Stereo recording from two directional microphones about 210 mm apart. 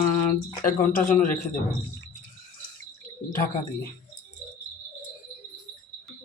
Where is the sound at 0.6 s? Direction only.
40° left (ahead or behind).